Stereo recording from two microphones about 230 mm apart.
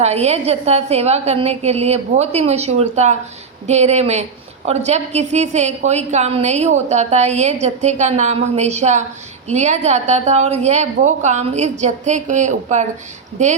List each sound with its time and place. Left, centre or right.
0.0 s a woman's voice: right